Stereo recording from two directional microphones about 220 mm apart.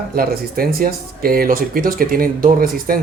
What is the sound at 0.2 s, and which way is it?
Speech, 40° right (ahead or behind).